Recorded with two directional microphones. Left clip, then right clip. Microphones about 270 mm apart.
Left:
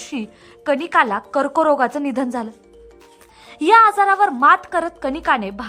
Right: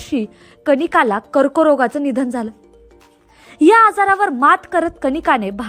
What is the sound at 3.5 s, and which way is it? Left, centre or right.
A woman's voice, centre.